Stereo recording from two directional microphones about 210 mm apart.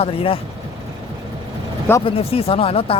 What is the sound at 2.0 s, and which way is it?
Speech, 25° left (ahead or behind).